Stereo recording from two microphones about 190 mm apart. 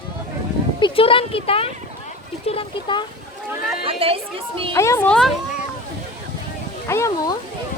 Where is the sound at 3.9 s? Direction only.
30° right (ahead or behind).